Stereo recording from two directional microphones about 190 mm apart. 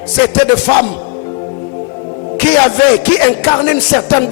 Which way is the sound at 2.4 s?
15° left (ahead or behind).